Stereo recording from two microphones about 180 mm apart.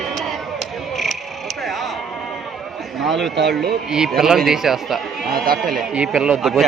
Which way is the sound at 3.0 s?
Centre (ahead or behind).